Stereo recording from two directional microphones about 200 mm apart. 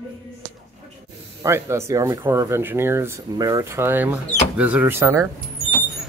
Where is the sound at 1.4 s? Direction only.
15° right (ahead or behind).